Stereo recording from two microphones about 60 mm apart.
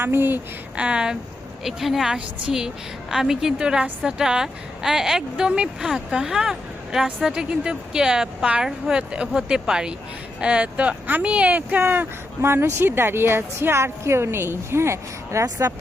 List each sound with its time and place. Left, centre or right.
0.0 s speech: right
0.8 s speech: centre
1.6 s speech: centre; by 12.0 s right
12.4 s speech: right